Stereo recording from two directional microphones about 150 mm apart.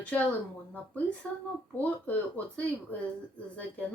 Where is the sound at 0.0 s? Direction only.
10° left (ahead or behind).